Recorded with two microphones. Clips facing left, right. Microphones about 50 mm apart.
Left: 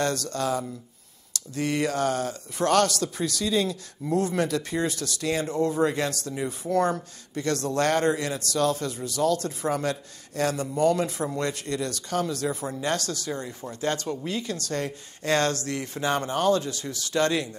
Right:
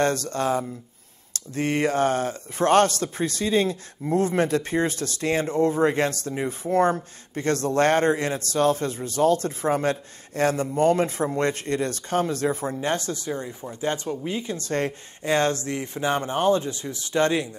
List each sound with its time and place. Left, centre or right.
0.0 s speech: right
14.7 s speech: right
15.2 s speech: right